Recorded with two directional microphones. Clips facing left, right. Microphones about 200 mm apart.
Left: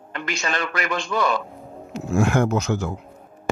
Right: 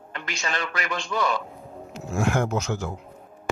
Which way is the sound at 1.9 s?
80° left.